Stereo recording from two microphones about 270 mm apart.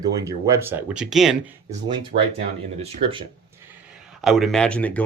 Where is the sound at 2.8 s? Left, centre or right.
Right.